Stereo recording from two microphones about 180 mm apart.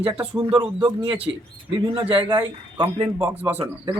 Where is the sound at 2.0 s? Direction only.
30° right (ahead or behind).